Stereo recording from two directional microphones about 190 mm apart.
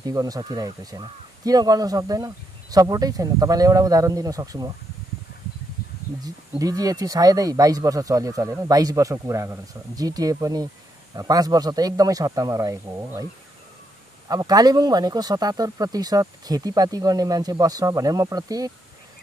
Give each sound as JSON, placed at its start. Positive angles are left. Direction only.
{"t": 0.0, "sound": "speech", "side_deg": -20}
{"t": 6.2, "sound": "speech", "side_deg": -20}